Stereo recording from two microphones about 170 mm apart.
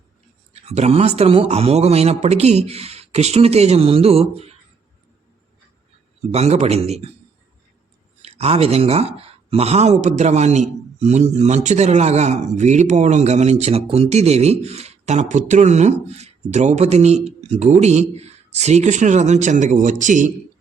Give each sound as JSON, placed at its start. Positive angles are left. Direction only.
{"t": 0.5, "sound": "speech", "side_deg": -40}
{"t": 6.3, "sound": "speech", "side_deg": -40}
{"t": 8.2, "sound": "speech", "side_deg": -35}